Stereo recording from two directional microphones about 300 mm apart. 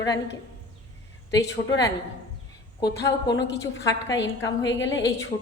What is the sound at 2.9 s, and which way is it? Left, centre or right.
Speech, left.